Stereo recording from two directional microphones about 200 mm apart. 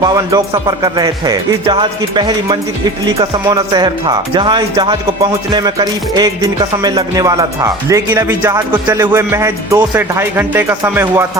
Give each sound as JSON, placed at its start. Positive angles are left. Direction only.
{"t": 0.0, "sound": "speech", "side_deg": -20}